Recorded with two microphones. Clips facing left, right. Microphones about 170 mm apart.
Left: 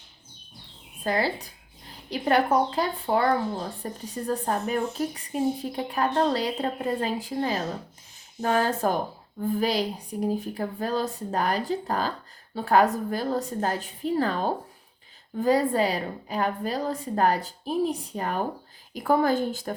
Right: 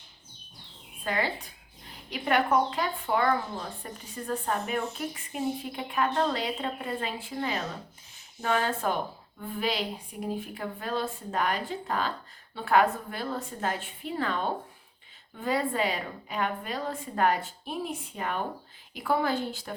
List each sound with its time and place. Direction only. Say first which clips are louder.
1.0 s a woman's voice: left 4 dB; 35° left (ahead or behind)